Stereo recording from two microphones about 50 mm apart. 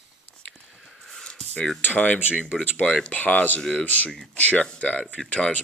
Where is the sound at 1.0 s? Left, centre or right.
Centre.